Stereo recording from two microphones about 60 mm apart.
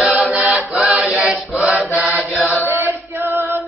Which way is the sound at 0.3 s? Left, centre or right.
Centre.